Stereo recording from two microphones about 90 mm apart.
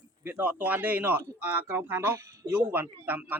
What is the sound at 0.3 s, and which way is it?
A man's voice, 20° right (ahead or behind).